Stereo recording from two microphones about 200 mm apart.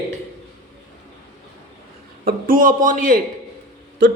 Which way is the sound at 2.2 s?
45° right (ahead or behind).